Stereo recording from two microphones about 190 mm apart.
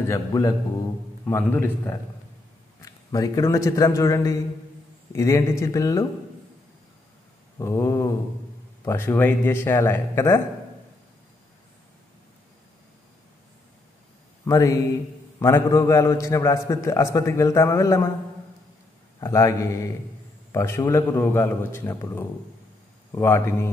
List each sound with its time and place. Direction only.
0.1 s a man's voice: 20° left (ahead or behind)
7.5 s a man's voice: 15° left (ahead or behind)
14.4 s a man's voice: 15° left (ahead or behind)
19.1 s a man's voice: 15° left (ahead or behind)